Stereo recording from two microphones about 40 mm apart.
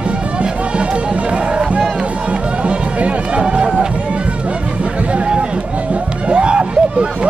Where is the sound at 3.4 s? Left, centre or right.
Right.